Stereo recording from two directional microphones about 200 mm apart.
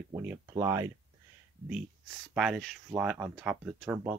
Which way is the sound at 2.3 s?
Centre (ahead or behind).